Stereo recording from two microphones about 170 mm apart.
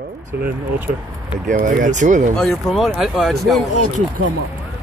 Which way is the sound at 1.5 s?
50° right (ahead or behind).